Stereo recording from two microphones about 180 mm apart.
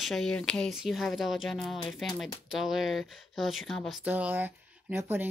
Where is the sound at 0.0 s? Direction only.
Centre (ahead or behind).